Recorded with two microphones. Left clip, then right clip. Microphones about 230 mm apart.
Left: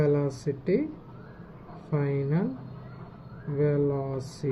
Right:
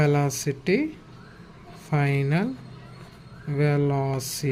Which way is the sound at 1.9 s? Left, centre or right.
Right.